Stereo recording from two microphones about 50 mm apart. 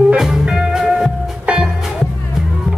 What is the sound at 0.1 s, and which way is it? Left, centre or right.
Music, centre.